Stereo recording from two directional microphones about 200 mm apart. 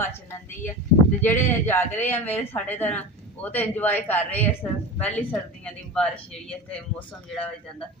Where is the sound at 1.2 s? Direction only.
10° left (ahead or behind).